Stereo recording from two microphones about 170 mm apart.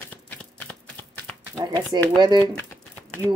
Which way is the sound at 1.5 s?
25° right (ahead or behind).